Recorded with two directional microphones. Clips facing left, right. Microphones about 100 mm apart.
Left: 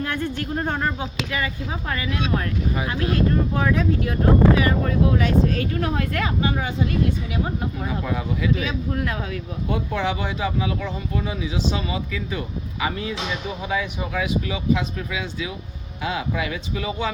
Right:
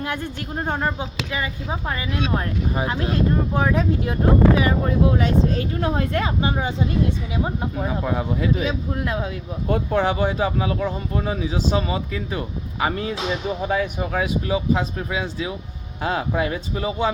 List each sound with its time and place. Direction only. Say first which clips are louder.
0.0 s speech: left 2 dB; 15° right (ahead or behind)
9.6 s speech: right 4 dB; 45° right (ahead or behind)